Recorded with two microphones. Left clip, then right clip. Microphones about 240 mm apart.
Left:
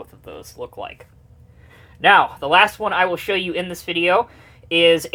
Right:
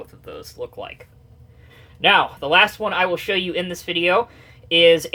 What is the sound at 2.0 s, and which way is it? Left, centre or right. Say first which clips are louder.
Speech: left 3 dB; left.